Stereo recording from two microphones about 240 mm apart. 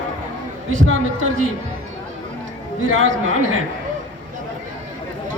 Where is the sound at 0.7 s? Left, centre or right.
Right.